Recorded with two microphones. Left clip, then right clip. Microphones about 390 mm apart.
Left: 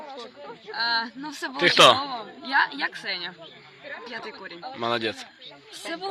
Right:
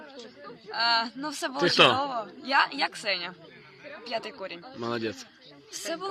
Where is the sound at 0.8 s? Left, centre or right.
Centre.